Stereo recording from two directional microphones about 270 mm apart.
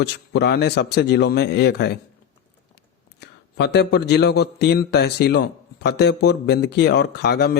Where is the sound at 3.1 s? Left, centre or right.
Left.